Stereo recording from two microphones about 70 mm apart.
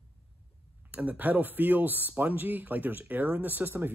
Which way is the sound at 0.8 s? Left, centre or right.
Right.